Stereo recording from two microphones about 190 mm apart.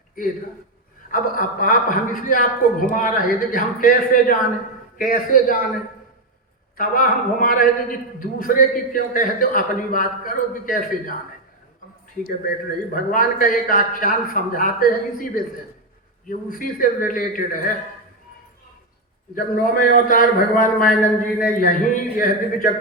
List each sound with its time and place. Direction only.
1.1 s a man's voice: 45° left (ahead or behind)
6.7 s a man's voice: 45° left (ahead or behind)
12.9 s a man's voice: 45° left (ahead or behind)
19.4 s a man's voice: 45° left (ahead or behind)